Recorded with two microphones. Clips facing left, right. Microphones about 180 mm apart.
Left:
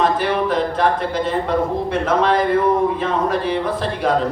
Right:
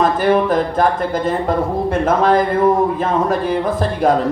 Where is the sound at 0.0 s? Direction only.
45° right (ahead or behind).